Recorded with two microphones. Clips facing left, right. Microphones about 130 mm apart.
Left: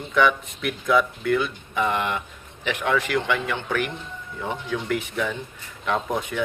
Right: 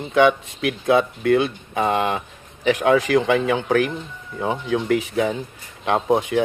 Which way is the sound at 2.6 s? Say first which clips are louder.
Right 7 dB; 40° right (ahead or behind).